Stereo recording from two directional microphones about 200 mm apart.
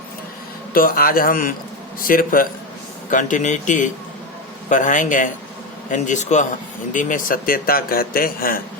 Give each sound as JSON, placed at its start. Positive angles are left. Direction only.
{"t": 0.7, "sound": "a man's voice", "side_deg": 45}